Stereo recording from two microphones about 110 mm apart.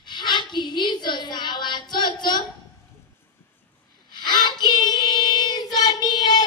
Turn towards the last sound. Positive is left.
turn(degrees=40)  # may be behind; listen again after turning